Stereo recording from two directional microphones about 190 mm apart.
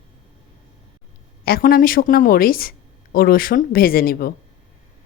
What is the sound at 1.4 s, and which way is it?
A woman's voice, 50° left (ahead or behind).